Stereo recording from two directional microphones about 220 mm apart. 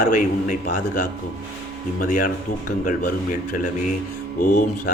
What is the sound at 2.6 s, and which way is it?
Speech, 40° left (ahead or behind).